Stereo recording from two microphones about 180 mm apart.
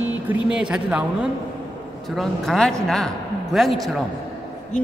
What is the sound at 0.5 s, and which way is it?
A woman's voice, 5° right (ahead or behind).